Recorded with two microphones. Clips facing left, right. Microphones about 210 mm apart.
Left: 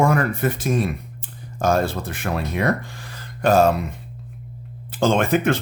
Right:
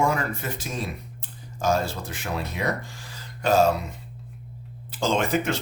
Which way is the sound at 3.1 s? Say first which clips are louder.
Left 4 dB; 55° left (ahead or behind).